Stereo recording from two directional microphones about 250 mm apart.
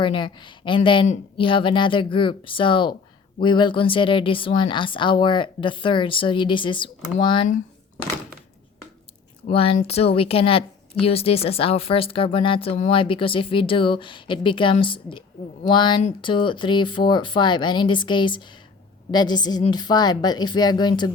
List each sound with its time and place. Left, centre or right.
0.0 s speech: centre
9.5 s a woman's voice: left